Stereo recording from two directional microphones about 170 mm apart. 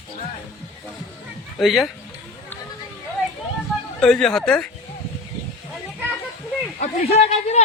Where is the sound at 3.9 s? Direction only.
5° left (ahead or behind).